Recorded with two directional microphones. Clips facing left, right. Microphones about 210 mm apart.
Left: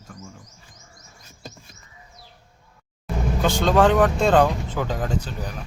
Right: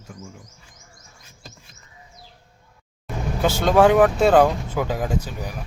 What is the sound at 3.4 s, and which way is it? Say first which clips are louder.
Speech: right 2 dB; 10° right (ahead or behind).